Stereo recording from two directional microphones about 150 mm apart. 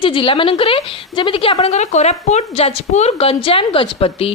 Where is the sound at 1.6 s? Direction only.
50° left (ahead or behind).